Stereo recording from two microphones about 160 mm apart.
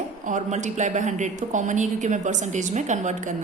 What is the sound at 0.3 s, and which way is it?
A woman's voice, 50° right (ahead or behind).